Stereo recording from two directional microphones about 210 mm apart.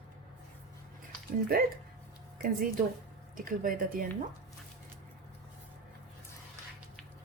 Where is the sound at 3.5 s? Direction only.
40° right (ahead or behind).